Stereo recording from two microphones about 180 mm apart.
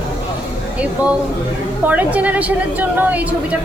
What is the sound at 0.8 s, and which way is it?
A woman's voice, 5° right (ahead or behind).